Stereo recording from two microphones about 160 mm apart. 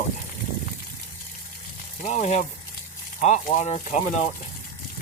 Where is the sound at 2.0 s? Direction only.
45° left (ahead or behind).